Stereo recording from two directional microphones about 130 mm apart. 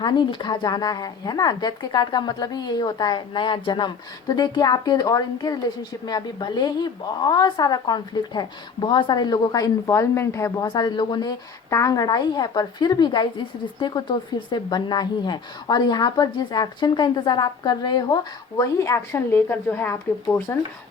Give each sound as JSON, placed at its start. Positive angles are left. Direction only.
{"t": 0.0, "sound": "speech", "side_deg": 35}
{"t": 10.7, "sound": "speech", "side_deg": 35}